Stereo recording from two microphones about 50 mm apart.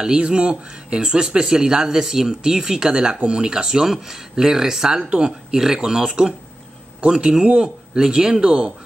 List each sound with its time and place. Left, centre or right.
0.0 s speech: centre